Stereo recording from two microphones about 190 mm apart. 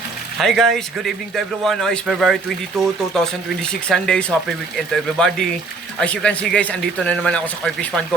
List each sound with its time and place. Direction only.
0.3 s a man's voice: centre (ahead or behind)